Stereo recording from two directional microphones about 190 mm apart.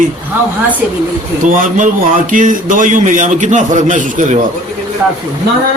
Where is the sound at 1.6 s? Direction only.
40° right (ahead or behind).